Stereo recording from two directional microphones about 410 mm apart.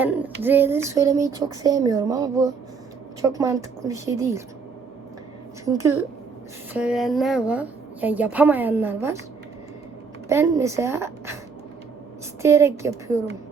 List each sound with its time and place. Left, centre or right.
0.0 s a sound: centre
0.4 s a woman's voice: centre
5.6 s a woman's voice: centre
10.2 s speech: centre
12.4 s speech: centre